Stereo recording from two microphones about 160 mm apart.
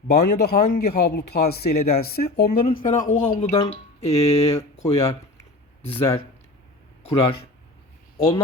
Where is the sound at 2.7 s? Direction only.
55° left (ahead or behind).